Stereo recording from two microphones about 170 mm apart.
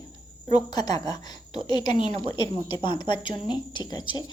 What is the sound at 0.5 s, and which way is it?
A woman's voice, 25° left (ahead or behind).